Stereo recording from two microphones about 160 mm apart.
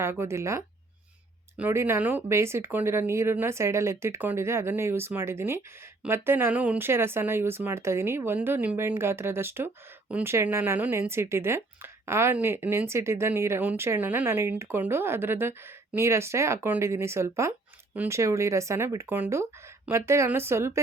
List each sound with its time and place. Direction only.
0.0 s speech: 15° right (ahead or behind)